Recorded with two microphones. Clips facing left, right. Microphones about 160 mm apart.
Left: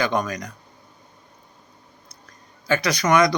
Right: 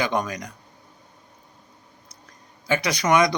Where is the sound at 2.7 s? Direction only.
20° right (ahead or behind).